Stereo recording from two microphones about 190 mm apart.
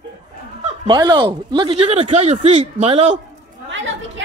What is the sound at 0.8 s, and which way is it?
Speech, 20° right (ahead or behind).